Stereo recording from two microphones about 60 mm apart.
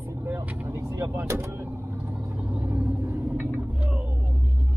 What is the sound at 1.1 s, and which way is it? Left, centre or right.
Vehicle, right.